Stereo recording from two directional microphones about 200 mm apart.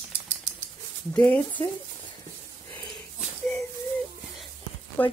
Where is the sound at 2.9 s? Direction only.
Centre (ahead or behind).